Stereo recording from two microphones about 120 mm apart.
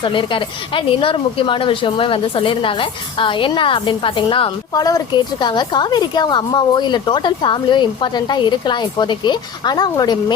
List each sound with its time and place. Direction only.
0.0 s a woman's voice: 45° left (ahead or behind)
4.7 s a woman's voice: 30° left (ahead or behind)